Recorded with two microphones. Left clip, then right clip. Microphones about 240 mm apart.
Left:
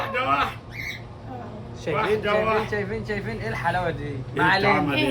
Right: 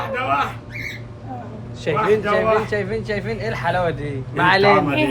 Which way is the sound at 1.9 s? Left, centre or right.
Right.